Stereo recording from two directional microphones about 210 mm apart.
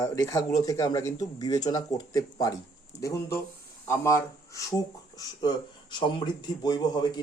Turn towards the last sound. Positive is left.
turn(degrees=20)  # may be behind; listen again after turning